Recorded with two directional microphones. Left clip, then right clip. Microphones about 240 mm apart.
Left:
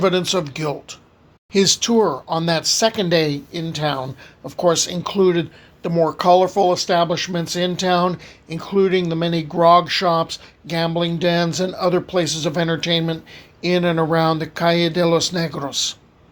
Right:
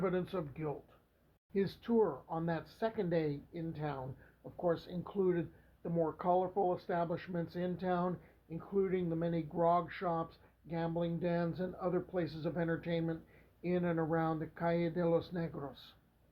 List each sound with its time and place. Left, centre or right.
0.0 s speech: left